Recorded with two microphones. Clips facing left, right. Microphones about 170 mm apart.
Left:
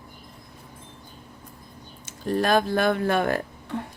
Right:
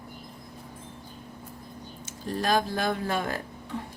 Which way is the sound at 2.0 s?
60° left (ahead or behind).